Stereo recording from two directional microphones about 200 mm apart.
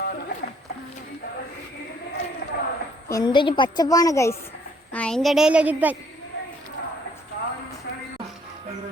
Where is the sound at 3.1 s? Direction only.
20° left (ahead or behind); by 6.0 s 10° right (ahead or behind).